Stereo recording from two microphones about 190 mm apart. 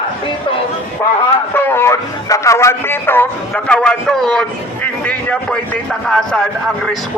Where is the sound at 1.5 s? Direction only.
10° left (ahead or behind).